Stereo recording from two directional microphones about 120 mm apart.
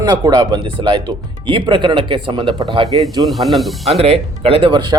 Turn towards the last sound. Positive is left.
turn(degrees=-40)  # may be behind; listen again after turning